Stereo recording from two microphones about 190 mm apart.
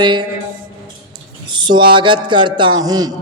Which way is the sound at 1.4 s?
25° right (ahead or behind).